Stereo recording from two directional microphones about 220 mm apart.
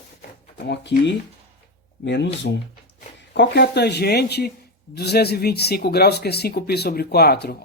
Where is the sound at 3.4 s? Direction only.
50° left (ahead or behind).